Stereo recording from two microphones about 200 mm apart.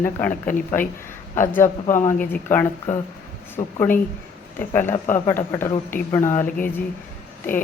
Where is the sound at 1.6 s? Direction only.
40° left (ahead or behind).